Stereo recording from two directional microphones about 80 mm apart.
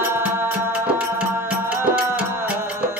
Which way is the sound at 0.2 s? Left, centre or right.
Right.